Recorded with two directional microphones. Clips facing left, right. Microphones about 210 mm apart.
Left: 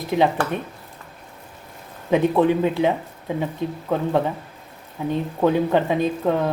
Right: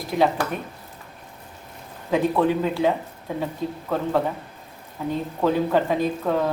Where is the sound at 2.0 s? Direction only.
20° left (ahead or behind).